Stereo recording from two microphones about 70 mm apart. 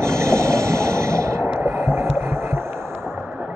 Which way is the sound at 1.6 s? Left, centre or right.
Right.